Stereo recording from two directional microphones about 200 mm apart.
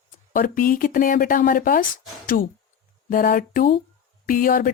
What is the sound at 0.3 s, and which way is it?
Speech, 45° left (ahead or behind).